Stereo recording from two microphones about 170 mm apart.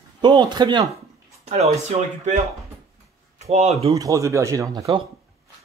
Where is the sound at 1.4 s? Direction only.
40° right (ahead or behind).